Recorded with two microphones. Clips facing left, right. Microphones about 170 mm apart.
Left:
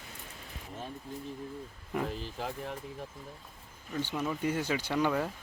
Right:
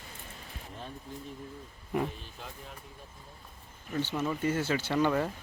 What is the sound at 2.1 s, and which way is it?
Speech, 80° left.